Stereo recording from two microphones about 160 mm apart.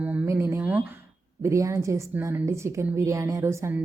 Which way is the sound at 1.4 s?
20° right (ahead or behind).